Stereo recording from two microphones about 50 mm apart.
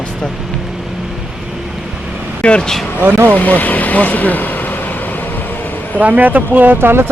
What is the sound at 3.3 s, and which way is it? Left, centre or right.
Speech, left.